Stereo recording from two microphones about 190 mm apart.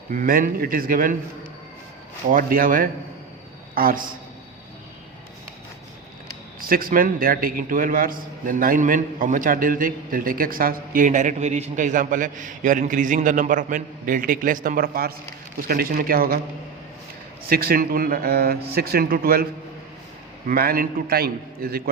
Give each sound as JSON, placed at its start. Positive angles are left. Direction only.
{"t": 0.1, "sound": "a man's voice", "side_deg": -45}
{"t": 2.3, "sound": "a man's voice", "side_deg": -50}
{"t": 6.6, "sound": "a man's voice", "side_deg": -50}
{"t": 17.5, "sound": "a man's voice", "side_deg": -50}
{"t": 20.5, "sound": "a man's voice", "side_deg": -50}